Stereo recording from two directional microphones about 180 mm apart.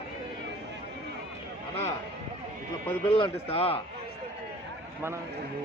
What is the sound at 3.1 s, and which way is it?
Speech, 30° left (ahead or behind).